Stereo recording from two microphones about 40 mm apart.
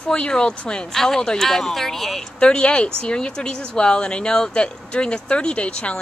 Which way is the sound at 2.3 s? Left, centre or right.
Left.